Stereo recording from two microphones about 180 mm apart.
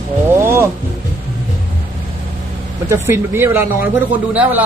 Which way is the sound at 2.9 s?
15° right (ahead or behind).